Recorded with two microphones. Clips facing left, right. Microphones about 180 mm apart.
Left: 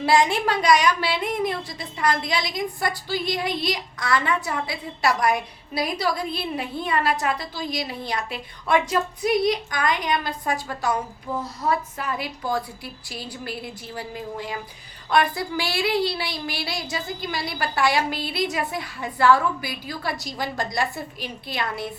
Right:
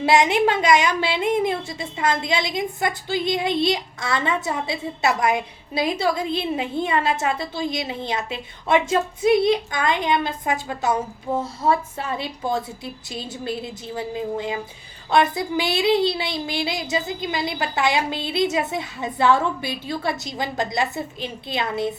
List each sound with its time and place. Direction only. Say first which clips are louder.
0.0 s a woman's voice: right 3 dB; 20° right (ahead or behind)